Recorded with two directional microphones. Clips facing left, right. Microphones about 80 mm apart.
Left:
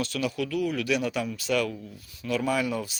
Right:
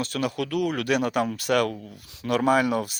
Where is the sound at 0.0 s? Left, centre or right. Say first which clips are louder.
Right 2 dB; right.